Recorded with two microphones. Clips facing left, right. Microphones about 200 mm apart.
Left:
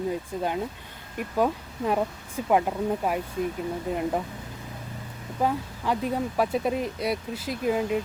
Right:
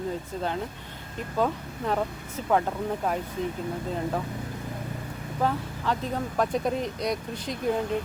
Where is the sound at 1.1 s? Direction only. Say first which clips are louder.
Left 2 dB; 10° left (ahead or behind).